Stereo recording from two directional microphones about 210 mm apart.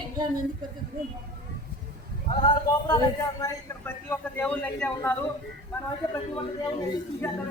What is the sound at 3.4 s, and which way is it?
A man's voice, 10° left (ahead or behind).